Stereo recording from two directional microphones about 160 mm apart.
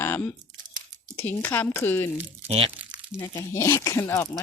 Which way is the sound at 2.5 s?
40° right (ahead or behind).